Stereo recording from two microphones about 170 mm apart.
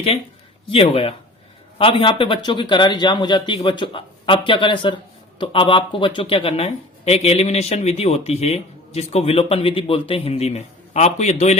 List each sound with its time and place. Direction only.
0.7 s a man's voice: 35° left (ahead or behind)